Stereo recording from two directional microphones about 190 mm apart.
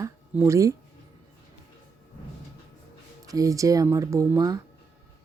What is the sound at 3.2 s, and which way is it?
Speech, 20° right (ahead or behind).